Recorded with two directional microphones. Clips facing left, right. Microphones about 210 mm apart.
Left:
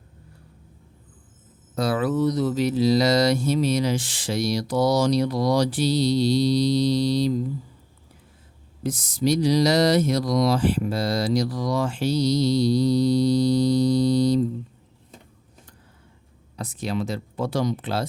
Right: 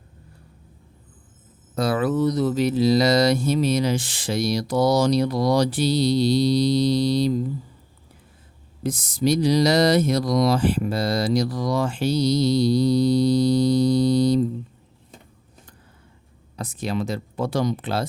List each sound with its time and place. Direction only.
1.7 s mantra: 55° right (ahead or behind)
8.8 s mantra: 55° right (ahead or behind)
16.6 s speech: 50° right (ahead or behind)